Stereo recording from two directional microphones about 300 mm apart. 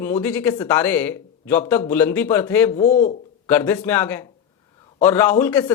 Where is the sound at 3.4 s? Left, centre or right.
Centre.